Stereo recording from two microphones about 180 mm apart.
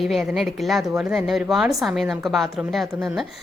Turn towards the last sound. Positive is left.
turn(degrees=0)  # may be behind; listen again after turning